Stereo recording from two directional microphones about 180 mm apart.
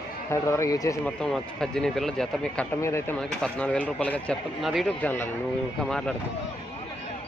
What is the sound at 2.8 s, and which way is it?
Speech, 15° left (ahead or behind).